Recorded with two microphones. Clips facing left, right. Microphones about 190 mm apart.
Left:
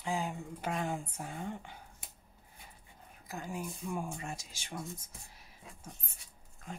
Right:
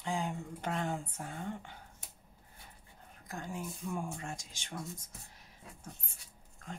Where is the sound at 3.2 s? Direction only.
5° left (ahead or behind).